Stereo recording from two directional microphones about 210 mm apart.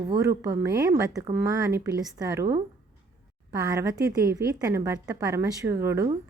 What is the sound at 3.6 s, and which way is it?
Speech, 15° right (ahead or behind).